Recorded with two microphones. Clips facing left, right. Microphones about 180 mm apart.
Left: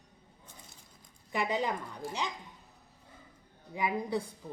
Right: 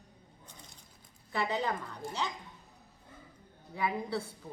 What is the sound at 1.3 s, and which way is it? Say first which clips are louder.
Speech: left 1 dB; 15° left (ahead or behind).